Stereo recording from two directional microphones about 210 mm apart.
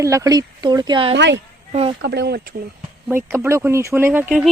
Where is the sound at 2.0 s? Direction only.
50° right (ahead or behind).